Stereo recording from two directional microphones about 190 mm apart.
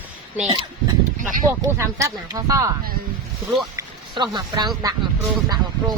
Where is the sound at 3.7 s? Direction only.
20° right (ahead or behind).